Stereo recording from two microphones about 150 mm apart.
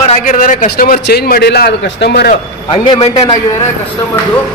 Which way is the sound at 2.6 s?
35° left (ahead or behind).